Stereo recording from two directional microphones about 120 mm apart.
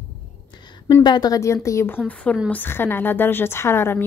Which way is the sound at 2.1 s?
10° left (ahead or behind).